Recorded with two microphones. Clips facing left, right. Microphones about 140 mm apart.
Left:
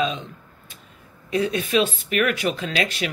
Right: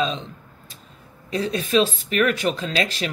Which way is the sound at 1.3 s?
35° right (ahead or behind).